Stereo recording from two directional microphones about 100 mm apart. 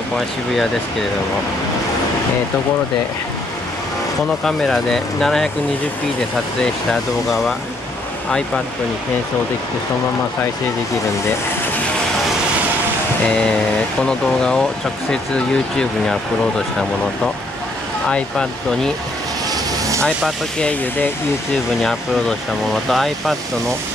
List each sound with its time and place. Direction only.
4.5 s speech: 5° left (ahead or behind)
6.6 s speech: 5° left (ahead or behind)
13.3 s speech: 10° left (ahead or behind)
18.0 s speech: 10° left (ahead or behind)
20.0 s speech: 10° left (ahead or behind)
22.8 s speech: centre (ahead or behind)